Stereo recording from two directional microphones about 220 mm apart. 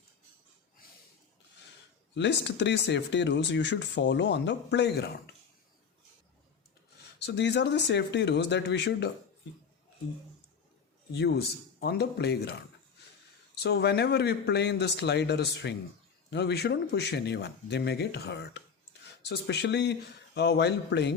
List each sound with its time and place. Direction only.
2.1 s speech: 50° left (ahead or behind)
7.2 s speech: 50° left (ahead or behind)
11.1 s speech: 50° left (ahead or behind)